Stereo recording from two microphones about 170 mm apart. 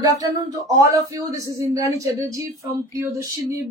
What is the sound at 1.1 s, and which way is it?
Speech, 20° right (ahead or behind).